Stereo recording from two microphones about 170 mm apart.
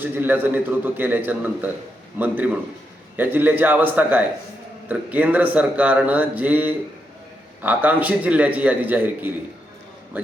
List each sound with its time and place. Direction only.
0.0 s a man's voice: 10° right (ahead or behind)